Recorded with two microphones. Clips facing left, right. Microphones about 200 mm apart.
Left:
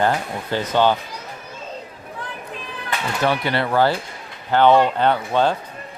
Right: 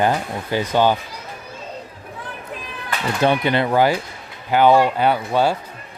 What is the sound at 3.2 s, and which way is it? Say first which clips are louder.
Speech: right 3 dB; 20° right (ahead or behind).